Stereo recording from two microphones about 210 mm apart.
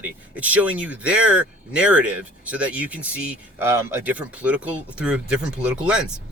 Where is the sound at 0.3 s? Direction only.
5° right (ahead or behind).